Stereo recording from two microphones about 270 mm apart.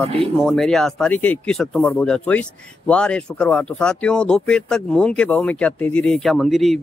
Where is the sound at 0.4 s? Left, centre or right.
Centre.